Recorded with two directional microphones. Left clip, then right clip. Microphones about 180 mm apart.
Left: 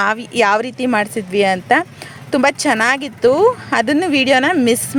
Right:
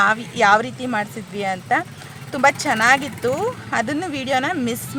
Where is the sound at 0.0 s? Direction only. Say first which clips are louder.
Left 1 dB; 40° left (ahead or behind).